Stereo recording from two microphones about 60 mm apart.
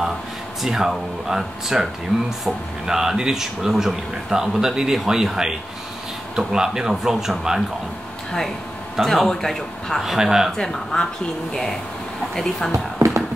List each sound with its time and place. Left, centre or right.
0.6 s speech: centre
9.0 s speech: centre
10.1 s speech: centre
10.6 s speech: centre
12.4 s speech: centre
12.7 s a sound: right